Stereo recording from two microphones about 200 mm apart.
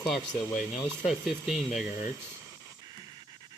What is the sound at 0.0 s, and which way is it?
Speech, centre (ahead or behind).